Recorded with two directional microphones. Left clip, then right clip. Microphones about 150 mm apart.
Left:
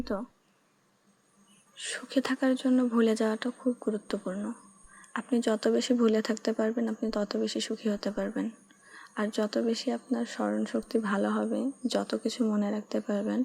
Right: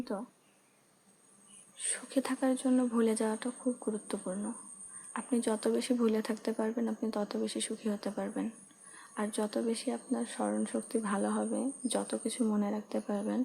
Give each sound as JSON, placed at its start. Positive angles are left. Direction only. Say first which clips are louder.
{"t": 0.0, "sound": "speech", "louder": "left 5 dB", "side_deg": 20}
{"t": 1.7, "sound": "speech", "louder": "left 4 dB", "side_deg": 20}